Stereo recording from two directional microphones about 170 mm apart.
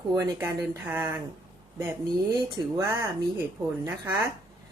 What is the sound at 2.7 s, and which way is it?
Speech, 15° right (ahead or behind).